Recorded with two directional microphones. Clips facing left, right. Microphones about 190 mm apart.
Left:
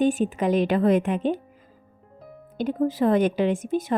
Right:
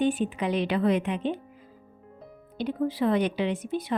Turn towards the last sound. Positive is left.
turn(degrees=45)  # may be behind; listen again after turning